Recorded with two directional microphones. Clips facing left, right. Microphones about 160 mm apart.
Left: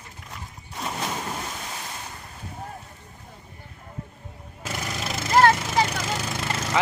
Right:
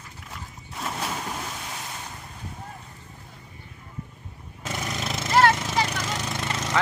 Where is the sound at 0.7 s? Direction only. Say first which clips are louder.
Left 1 dB; centre (ahead or behind).